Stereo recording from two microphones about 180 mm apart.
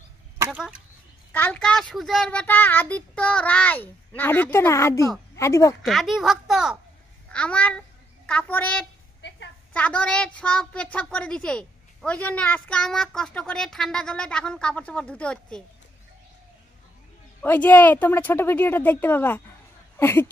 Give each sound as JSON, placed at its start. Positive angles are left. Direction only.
{"t": 0.4, "sound": "speech", "side_deg": -5}
{"t": 1.3, "sound": "a child's voice", "side_deg": 10}
{"t": 5.8, "sound": "a woman's voice", "side_deg": 0}
{"t": 17.4, "sound": "a child's voice", "side_deg": 10}